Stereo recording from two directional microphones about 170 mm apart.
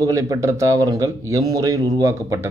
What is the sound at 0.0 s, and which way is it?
Speech, 20° right (ahead or behind).